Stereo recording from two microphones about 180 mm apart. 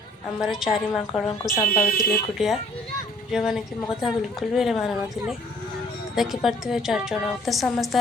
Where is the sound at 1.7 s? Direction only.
55° left (ahead or behind).